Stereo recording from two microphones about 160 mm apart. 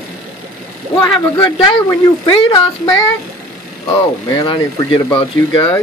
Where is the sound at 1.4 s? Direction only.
25° left (ahead or behind).